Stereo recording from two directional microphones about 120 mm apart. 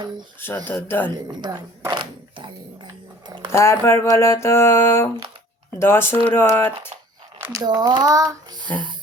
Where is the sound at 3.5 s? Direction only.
25° left (ahead or behind).